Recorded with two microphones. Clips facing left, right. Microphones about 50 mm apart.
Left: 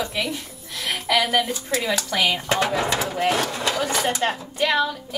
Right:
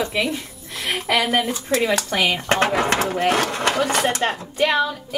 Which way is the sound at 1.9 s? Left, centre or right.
Right.